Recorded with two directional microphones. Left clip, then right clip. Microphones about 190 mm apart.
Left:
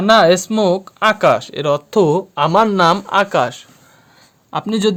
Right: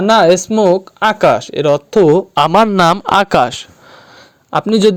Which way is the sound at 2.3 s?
50° right (ahead or behind).